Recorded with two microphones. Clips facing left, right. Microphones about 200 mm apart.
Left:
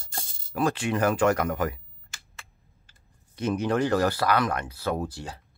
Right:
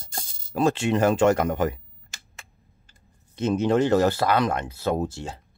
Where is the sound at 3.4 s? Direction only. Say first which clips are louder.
Right 4 dB; 25° right (ahead or behind).